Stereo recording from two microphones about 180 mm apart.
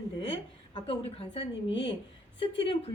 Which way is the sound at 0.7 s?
30° left (ahead or behind).